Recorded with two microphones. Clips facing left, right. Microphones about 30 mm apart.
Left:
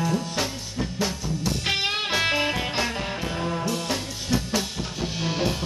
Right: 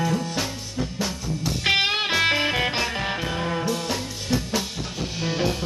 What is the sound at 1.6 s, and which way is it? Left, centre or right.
Music, right.